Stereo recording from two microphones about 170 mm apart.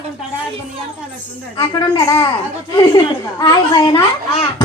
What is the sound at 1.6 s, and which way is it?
A child's voice, 25° left (ahead or behind).